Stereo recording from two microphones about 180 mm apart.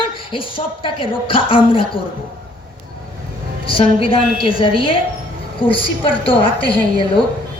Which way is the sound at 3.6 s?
30° left (ahead or behind).